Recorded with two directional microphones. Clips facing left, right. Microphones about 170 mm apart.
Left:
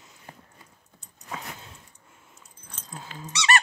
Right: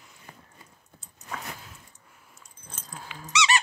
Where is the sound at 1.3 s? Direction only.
25° left (ahead or behind).